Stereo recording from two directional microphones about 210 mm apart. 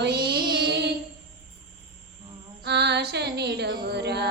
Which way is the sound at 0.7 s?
50° right (ahead or behind).